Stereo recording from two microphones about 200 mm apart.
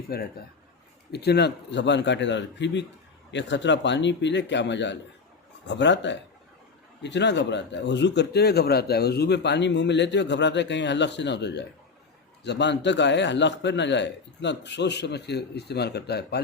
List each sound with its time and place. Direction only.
0.1 s a man's voice: 50° left (ahead or behind)